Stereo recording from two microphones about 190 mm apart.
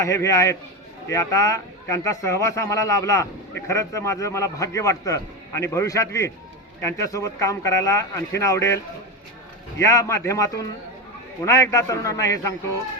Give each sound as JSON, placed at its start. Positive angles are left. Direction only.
{"t": 0.0, "sound": "a man's voice", "side_deg": 15}